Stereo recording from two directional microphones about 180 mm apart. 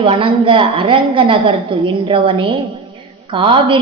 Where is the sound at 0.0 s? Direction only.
30° right (ahead or behind).